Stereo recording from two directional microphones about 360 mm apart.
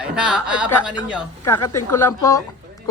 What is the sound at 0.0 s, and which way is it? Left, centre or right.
A man's voice, centre.